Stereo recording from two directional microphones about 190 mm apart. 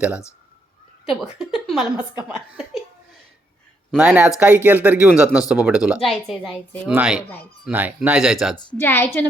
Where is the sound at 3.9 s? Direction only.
5° right (ahead or behind).